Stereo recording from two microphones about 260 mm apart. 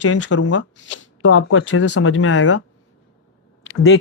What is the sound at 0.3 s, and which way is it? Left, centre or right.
Speech, left.